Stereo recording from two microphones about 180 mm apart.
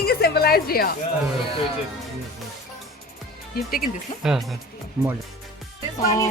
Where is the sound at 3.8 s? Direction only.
Centre (ahead or behind).